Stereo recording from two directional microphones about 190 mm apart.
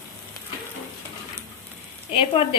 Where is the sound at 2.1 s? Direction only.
25° left (ahead or behind).